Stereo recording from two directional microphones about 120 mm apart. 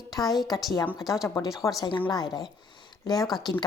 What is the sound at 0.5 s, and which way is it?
A woman's voice, centre (ahead or behind).